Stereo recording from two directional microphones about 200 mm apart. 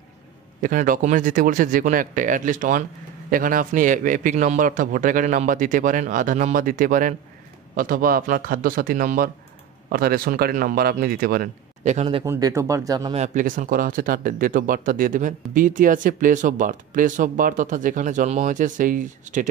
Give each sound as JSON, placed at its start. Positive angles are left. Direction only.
{"t": 0.6, "sound": "speech", "side_deg": -45}
{"t": 12.3, "sound": "speech", "side_deg": -15}
{"t": 13.1, "sound": "speech", "side_deg": -35}